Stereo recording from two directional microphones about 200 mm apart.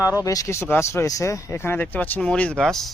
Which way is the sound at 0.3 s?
15° left (ahead or behind).